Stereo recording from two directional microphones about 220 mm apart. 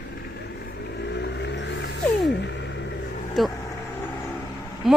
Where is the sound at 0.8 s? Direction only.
50° left (ahead or behind).